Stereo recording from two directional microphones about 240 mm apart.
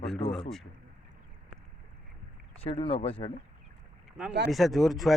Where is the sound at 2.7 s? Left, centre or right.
Left.